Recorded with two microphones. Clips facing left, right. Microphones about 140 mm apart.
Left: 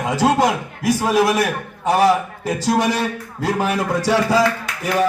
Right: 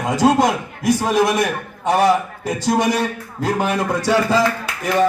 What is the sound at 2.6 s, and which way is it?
Music, 10° left (ahead or behind).